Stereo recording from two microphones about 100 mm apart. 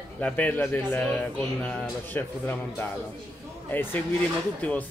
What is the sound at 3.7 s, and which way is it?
Speech, 20° left (ahead or behind).